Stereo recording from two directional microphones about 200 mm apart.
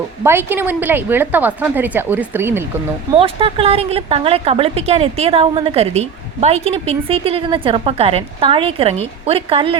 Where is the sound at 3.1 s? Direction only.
30° right (ahead or behind).